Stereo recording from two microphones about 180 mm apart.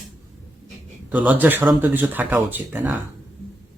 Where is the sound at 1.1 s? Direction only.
10° right (ahead or behind).